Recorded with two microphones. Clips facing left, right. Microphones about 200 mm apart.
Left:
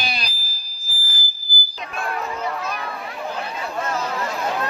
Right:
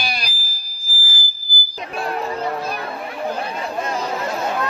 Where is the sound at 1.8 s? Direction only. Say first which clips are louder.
Right 3 dB; 35° right (ahead or behind).